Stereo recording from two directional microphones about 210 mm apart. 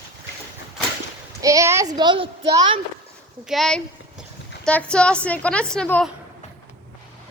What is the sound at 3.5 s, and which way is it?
A woman's voice, centre (ahead or behind).